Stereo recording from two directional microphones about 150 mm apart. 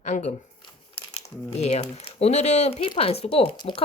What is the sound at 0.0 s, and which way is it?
Speech, 50° left (ahead or behind).